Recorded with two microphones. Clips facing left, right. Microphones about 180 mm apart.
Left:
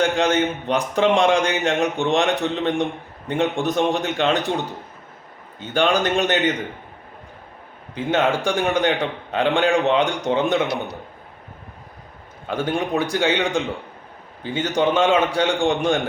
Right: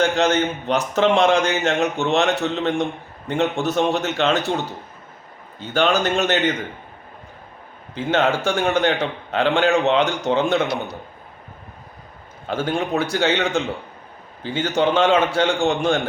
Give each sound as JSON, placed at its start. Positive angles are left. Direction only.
{"t": 0.0, "sound": "a man's voice", "side_deg": 15}
{"t": 5.7, "sound": "a man's voice", "side_deg": 15}
{"t": 7.9, "sound": "a man's voice", "side_deg": 15}
{"t": 12.5, "sound": "a man's voice", "side_deg": 15}